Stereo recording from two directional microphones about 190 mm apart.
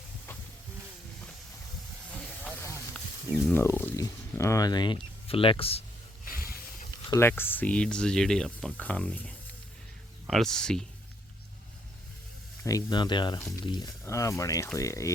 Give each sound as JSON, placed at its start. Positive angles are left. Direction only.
{"t": 3.5, "sound": "speech", "side_deg": 10}
{"t": 7.1, "sound": "speech", "side_deg": 10}
{"t": 12.6, "sound": "speech", "side_deg": 20}